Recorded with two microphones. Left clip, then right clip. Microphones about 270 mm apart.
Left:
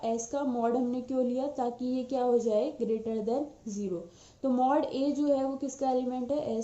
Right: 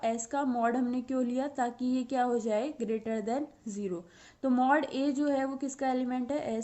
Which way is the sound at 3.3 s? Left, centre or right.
Right.